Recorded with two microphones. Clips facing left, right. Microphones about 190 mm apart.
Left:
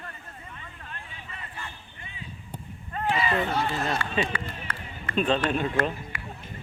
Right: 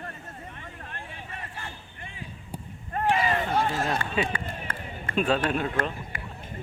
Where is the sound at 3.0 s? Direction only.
45° right (ahead or behind).